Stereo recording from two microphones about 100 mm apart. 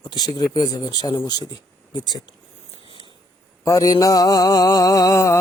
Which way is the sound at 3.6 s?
35° left (ahead or behind).